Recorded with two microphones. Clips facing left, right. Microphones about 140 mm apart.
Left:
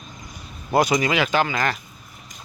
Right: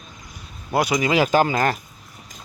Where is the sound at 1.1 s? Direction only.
35° right (ahead or behind).